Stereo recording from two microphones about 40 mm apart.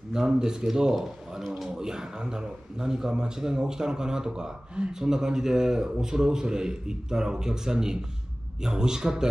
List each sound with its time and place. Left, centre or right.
0.1 s a man's voice: centre